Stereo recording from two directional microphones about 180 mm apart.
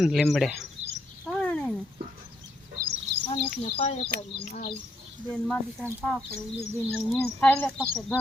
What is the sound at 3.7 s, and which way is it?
Speech, 30° left (ahead or behind).